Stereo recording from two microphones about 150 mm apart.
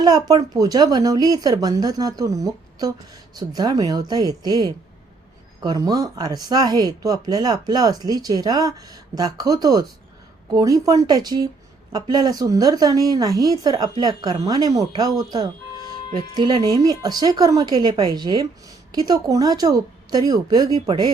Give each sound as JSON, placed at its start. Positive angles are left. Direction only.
{"t": 0.0, "sound": "speech", "side_deg": -25}